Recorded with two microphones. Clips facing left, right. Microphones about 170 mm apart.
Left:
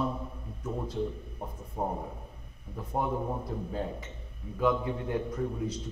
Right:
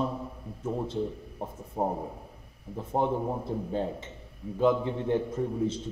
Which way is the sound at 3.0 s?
25° right (ahead or behind).